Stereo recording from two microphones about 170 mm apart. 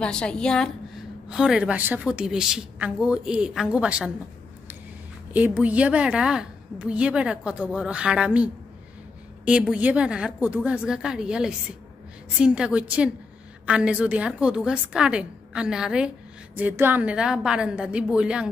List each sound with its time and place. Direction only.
0.0 s a woman's voice: 5° left (ahead or behind)
5.3 s a woman's voice: 10° right (ahead or behind)